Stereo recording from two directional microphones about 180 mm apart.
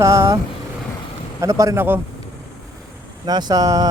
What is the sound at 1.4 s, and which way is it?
Speech, 15° right (ahead or behind).